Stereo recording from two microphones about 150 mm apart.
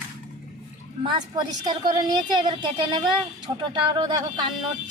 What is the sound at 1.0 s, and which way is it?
A woman's voice, 30° right (ahead or behind).